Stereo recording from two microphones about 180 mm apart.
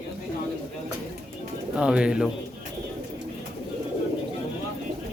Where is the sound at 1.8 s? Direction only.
5° right (ahead or behind).